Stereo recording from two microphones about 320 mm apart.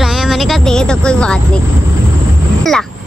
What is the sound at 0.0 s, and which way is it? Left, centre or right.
Music, centre.